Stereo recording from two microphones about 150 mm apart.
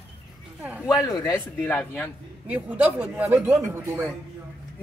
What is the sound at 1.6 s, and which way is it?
Speech, 10° left (ahead or behind).